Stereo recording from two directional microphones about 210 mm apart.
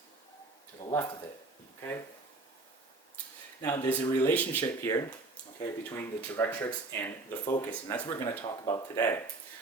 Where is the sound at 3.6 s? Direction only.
10° left (ahead or behind).